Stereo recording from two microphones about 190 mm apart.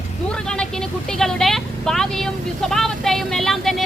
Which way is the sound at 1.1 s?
Centre (ahead or behind).